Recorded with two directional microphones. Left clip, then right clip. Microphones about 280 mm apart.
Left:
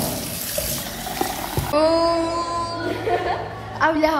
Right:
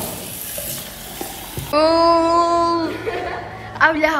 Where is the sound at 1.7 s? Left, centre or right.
Centre.